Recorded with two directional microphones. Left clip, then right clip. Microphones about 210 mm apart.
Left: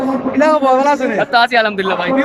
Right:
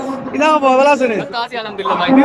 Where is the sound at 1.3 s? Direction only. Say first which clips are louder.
Left 10 dB; 45° left (ahead or behind).